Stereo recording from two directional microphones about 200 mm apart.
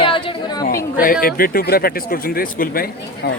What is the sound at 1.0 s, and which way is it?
Speech, 45° left (ahead or behind).